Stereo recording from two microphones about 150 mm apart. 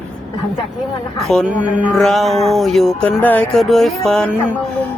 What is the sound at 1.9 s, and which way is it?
Music, centre (ahead or behind).